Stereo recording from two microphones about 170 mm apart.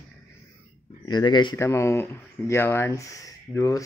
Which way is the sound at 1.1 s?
25° left (ahead or behind).